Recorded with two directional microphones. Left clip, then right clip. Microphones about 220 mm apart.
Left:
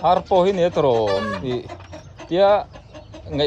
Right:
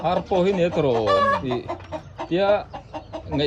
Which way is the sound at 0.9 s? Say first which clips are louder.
Left 3 dB; 35° left (ahead or behind).